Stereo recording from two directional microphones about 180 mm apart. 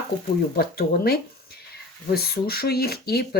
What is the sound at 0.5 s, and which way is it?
Speech, 60° left (ahead or behind).